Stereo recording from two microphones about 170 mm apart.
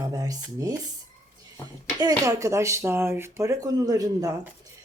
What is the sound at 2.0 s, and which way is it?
Speech, 20° right (ahead or behind).